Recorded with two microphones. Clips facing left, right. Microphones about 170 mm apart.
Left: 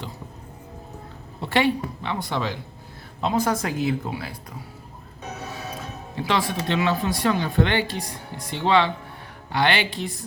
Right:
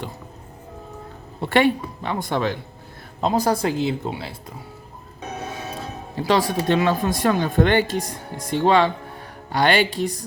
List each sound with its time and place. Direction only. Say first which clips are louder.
1.4 s speech: right 3 dB; 55° right (ahead or behind)
3.2 s speech: right 3 dB; 40° right (ahead or behind)
5.7 s speech: right 3 dB; 35° right (ahead or behind)